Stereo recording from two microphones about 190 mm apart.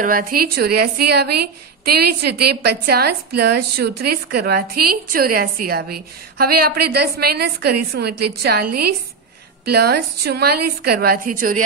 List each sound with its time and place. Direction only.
0.0 s a woman's voice: 50° right (ahead or behind)
11.2 s speech: 45° right (ahead or behind)